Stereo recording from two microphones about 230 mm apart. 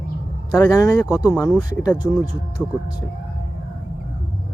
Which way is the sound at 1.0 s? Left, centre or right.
Centre.